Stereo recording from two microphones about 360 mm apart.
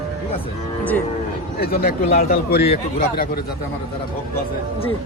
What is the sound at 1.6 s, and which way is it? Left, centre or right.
A man's voice, left.